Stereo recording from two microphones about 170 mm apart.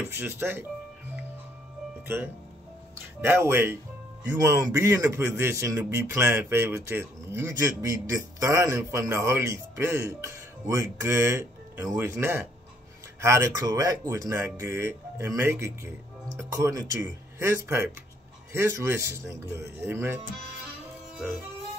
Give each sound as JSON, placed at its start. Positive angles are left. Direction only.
{"t": 0.0, "sound": "a man's voice", "side_deg": -15}
{"t": 3.2, "sound": "a man's voice", "side_deg": -15}